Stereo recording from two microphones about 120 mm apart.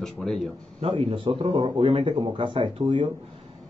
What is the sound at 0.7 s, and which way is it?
A man's voice, 55° right (ahead or behind).